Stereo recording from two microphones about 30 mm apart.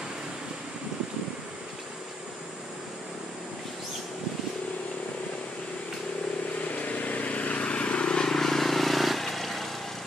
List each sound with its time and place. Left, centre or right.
6.7 s vehicle: left
8.3 s vehicle: centre